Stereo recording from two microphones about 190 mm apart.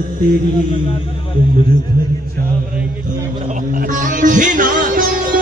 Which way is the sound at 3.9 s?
45° right (ahead or behind).